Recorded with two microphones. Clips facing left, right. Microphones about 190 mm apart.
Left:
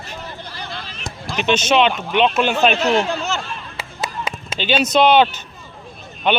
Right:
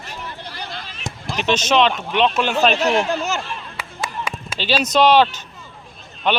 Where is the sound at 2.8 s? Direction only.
10° right (ahead or behind).